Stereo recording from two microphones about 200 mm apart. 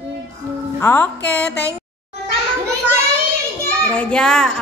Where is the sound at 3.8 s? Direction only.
5° left (ahead or behind).